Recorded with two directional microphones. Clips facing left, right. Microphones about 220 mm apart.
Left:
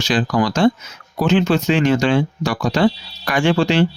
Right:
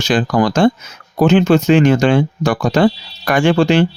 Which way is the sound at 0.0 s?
50° right (ahead or behind).